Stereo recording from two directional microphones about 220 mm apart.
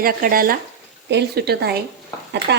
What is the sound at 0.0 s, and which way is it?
Speech, 40° right (ahead or behind).